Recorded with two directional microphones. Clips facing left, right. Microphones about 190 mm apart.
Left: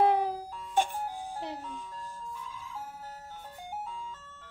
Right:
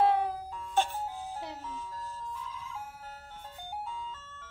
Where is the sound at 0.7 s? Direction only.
15° left (ahead or behind).